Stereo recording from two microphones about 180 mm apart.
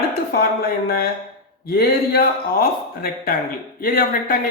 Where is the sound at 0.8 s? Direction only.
55° left (ahead or behind).